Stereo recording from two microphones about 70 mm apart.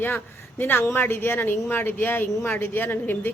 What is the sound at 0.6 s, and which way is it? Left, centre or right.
A woman's voice, left.